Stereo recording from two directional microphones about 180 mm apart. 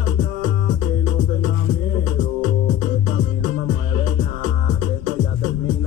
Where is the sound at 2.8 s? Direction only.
45° right (ahead or behind).